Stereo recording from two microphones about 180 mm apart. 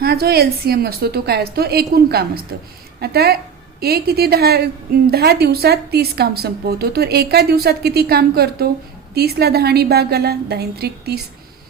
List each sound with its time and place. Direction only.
0.0 s a woman's voice: 60° right (ahead or behind)